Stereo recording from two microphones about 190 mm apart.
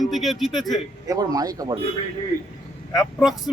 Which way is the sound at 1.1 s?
20° right (ahead or behind).